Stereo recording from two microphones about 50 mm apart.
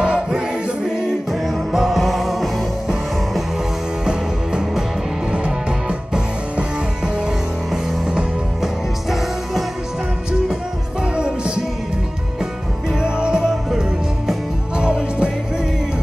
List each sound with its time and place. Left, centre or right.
0.0 s music: centre
1.3 s music: centre
4.0 s music: centre
7.7 s music: centre
11.1 s music: centre
13.0 s music: centre
13.5 s music: centre
14.8 s music: right